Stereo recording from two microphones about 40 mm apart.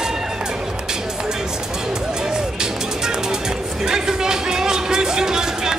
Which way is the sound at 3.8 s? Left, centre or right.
Centre.